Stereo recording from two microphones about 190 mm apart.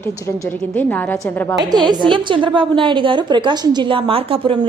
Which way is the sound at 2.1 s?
25° right (ahead or behind).